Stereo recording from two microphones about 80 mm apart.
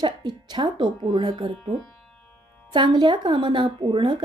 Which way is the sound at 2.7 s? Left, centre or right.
Right.